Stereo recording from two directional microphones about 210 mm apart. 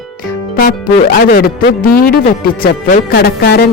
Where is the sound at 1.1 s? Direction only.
45° left (ahead or behind).